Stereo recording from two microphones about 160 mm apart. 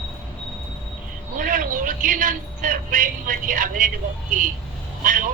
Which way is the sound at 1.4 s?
60° right (ahead or behind).